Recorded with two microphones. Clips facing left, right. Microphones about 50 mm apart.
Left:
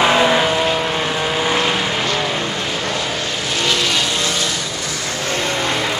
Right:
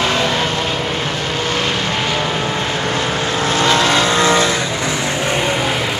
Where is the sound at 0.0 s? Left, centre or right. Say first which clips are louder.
Left 3 dB; centre.